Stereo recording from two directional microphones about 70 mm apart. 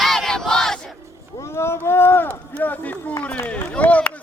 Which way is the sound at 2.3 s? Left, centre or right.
Left.